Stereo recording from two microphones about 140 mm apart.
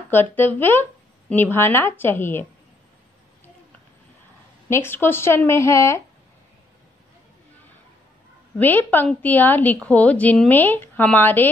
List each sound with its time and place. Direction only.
0.1 s a woman's voice: 15° left (ahead or behind)
4.6 s a woman's voice: 15° left (ahead or behind)
8.5 s a woman's voice: 15° left (ahead or behind)